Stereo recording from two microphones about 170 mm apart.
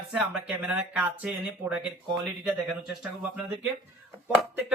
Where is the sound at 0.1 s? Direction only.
5° right (ahead or behind).